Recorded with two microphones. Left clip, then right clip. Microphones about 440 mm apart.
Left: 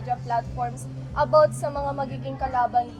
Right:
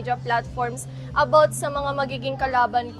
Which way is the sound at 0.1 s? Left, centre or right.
Right.